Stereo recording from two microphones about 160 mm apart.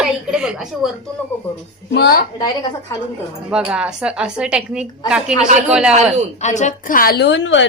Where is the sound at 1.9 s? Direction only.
75° left (ahead or behind).